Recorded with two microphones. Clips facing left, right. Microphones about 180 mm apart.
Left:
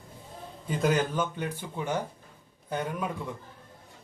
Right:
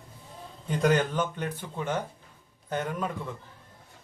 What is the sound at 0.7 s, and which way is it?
A man's voice, 5° left (ahead or behind).